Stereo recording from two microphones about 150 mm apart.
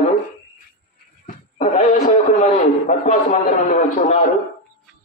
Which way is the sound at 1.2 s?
50° left (ahead or behind).